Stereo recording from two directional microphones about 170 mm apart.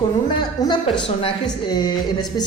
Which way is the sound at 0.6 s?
20° left (ahead or behind).